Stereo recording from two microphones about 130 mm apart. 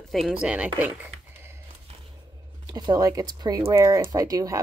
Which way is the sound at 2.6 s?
35° right (ahead or behind).